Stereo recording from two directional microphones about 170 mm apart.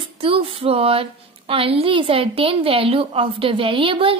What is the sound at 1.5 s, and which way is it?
A child's voice, 35° right (ahead or behind).